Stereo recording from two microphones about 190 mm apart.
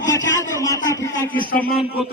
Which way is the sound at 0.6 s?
20° left (ahead or behind).